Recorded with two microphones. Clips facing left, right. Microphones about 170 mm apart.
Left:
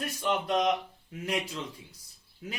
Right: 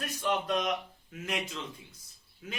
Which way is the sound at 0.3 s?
25° left (ahead or behind).